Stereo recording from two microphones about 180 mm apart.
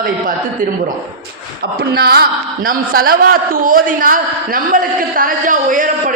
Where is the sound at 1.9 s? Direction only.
60° right (ahead or behind).